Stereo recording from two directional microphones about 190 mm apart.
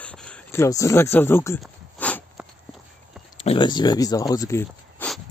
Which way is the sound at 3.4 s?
25° left (ahead or behind).